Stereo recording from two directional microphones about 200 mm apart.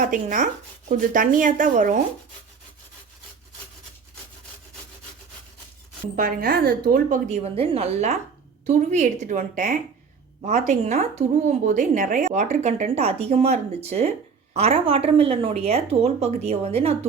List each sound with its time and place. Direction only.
0.0 s a woman's voice: 40° right (ahead or behind)
6.1 s a woman's voice: 50° right (ahead or behind)
7.3 s a woman's voice: 30° right (ahead or behind)